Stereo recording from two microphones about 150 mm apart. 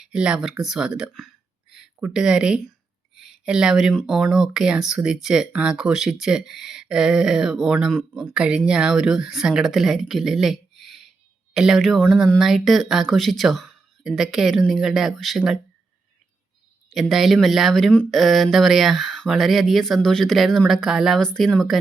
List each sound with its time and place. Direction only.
0.0 s speech: 5° right (ahead or behind)
16.9 s speech: centre (ahead or behind)